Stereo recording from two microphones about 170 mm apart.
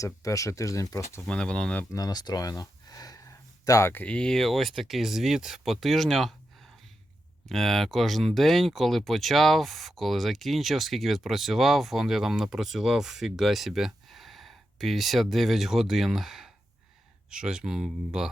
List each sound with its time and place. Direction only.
0.0 s speech: 20° left (ahead or behind)
1.2 s speech: 5° left (ahead or behind)
7.4 s speech: centre (ahead or behind)